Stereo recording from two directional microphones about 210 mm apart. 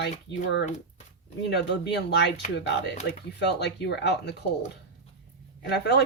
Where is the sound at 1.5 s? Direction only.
55° left (ahead or behind).